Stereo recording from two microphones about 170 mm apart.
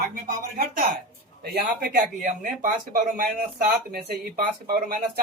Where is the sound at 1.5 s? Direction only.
55° right (ahead or behind).